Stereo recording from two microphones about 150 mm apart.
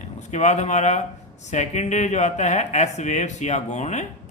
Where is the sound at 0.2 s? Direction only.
50° left (ahead or behind).